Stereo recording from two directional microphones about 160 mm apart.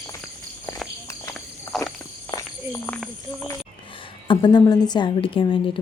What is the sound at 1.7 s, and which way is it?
Walk, centre (ahead or behind).